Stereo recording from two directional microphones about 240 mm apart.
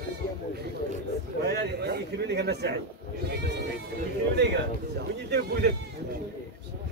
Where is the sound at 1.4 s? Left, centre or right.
Right.